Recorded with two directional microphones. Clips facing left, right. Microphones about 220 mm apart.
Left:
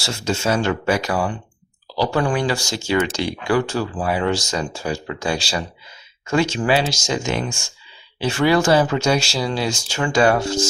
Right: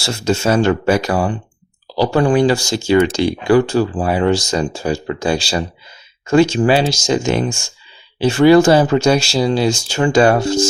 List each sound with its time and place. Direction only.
0.0 s speech: 35° right (ahead or behind)